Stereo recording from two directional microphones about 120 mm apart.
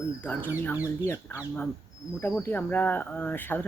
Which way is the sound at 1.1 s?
20° left (ahead or behind).